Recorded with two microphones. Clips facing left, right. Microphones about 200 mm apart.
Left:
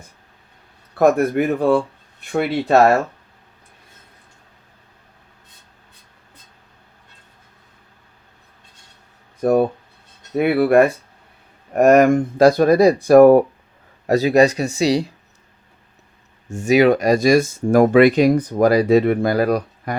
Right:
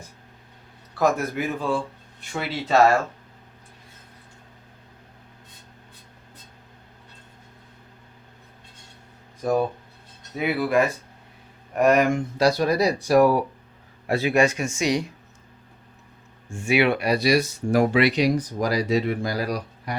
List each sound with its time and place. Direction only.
0.9 s speech: 60° left (ahead or behind)
9.4 s speech: 60° left (ahead or behind)
11.7 s speech: 45° left (ahead or behind)
14.1 s speech: 40° left (ahead or behind)
16.5 s speech: 40° left (ahead or behind)